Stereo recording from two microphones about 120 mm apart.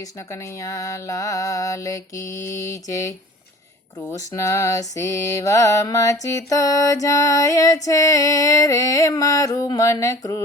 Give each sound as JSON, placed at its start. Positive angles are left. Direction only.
{"t": 0.0, "sound": "mantra", "side_deg": 25}